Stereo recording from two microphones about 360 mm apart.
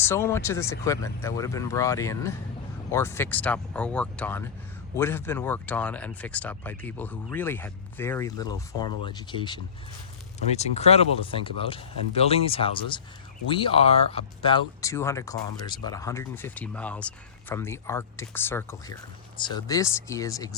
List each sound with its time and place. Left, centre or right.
0.0 s speech: centre